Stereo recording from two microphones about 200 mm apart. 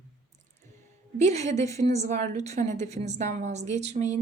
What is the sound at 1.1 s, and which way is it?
Speech, 35° right (ahead or behind).